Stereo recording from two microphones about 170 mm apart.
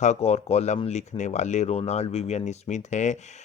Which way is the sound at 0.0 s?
40° left (ahead or behind).